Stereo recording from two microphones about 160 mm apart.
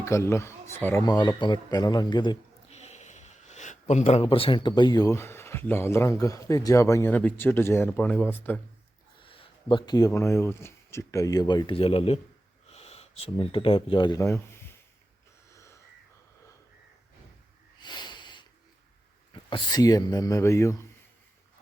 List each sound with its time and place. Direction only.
0.0 s speech: 15° left (ahead or behind)
1.0 s speech: 25° left (ahead or behind)
2.6 s speech: 45° left (ahead or behind); by 8.6 s 10° left (ahead or behind)
9.2 s speech: 35° left (ahead or behind)
12.7 s a sound: 40° left (ahead or behind)
13.3 s speech: 35° left (ahead or behind); by 14.6 s 15° left (ahead or behind)
17.7 s snort: 25° left (ahead or behind)
19.3 s speech: 30° left (ahead or behind)